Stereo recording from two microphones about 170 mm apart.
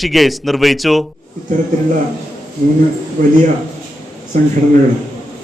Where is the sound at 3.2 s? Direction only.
50° right (ahead or behind).